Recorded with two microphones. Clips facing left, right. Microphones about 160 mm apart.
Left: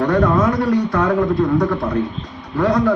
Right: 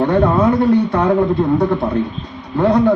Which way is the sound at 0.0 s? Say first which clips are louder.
Right 2 dB; 30° right (ahead or behind).